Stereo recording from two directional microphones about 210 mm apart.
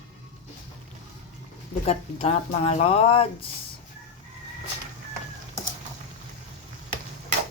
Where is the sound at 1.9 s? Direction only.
30° left (ahead or behind).